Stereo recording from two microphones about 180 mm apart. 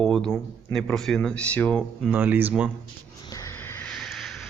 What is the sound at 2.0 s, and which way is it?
Speech, 10° right (ahead or behind).